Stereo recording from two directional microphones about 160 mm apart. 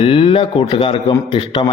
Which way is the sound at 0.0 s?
35° left (ahead or behind).